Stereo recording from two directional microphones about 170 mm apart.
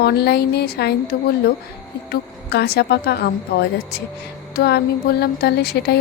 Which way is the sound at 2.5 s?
70° left (ahead or behind).